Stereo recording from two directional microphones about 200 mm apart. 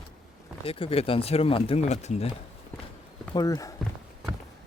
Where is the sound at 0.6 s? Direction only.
25° left (ahead or behind).